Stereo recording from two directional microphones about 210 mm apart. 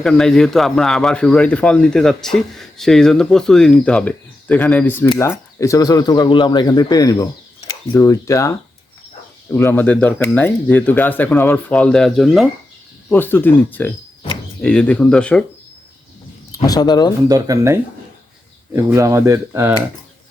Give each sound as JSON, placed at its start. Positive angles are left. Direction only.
{"t": 0.0, "sound": "speech", "side_deg": 0}
{"t": 16.6, "sound": "speech", "side_deg": 20}
{"t": 17.2, "sound": "speech", "side_deg": -15}